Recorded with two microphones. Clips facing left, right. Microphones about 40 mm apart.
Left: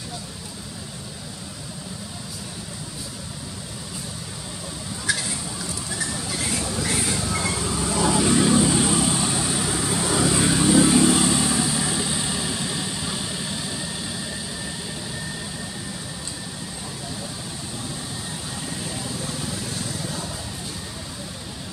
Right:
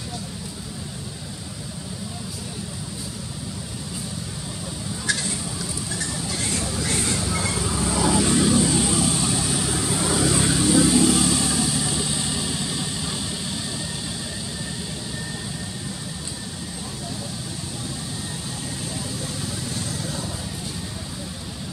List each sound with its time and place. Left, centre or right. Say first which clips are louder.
5.1 s a sound: left 1 dB; centre
5.9 s vehicle: left 1 dB; centre
10.7 s vehicle: left 1 dB; left